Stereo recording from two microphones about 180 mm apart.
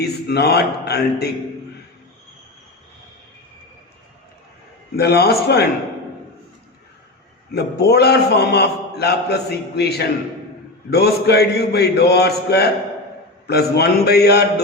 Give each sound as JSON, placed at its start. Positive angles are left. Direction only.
{"t": 0.0, "sound": "a man's voice", "side_deg": 65}
{"t": 4.9, "sound": "a man's voice", "side_deg": 60}
{"t": 7.5, "sound": "a man's voice", "side_deg": 65}